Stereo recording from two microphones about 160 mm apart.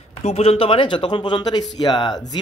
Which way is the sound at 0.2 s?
40° left (ahead or behind).